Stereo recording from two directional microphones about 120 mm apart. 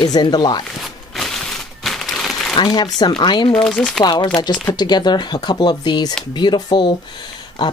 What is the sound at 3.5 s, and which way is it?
Speech, 5° left (ahead or behind).